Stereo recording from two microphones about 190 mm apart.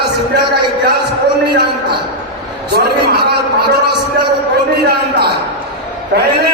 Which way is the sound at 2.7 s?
60° right (ahead or behind).